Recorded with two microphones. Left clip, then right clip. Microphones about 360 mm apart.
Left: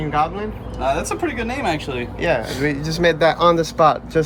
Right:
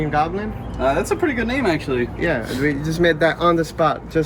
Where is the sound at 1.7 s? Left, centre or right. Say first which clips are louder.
Right 2 dB; left.